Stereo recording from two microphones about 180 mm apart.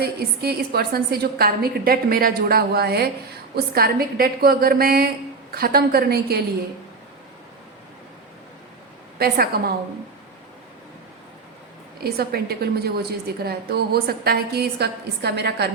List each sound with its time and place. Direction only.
0.0 s a woman's voice: 60° right (ahead or behind)
9.1 s a woman's voice: 60° right (ahead or behind)
12.0 s a woman's voice: 60° right (ahead or behind)